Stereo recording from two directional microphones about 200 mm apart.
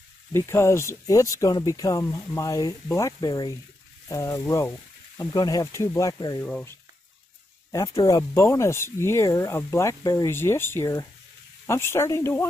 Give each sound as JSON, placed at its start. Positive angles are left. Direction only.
{"t": 0.3, "sound": "speech", "side_deg": 15}
{"t": 6.4, "sound": "speech", "side_deg": 5}
{"t": 8.0, "sound": "speech", "side_deg": 15}